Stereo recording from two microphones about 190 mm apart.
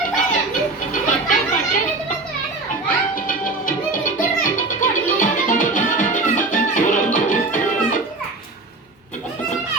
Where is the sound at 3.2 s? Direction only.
45° left (ahead or behind).